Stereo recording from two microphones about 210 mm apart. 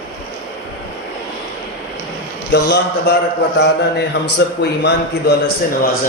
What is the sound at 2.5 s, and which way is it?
Speech, 55° left (ahead or behind).